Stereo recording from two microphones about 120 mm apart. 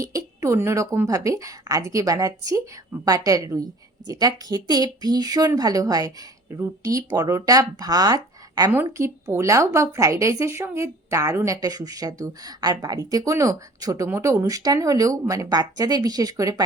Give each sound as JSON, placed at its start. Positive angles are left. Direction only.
{"t": 0.0, "sound": "a woman's voice", "side_deg": -25}
{"t": 8.7, "sound": "speech", "side_deg": -20}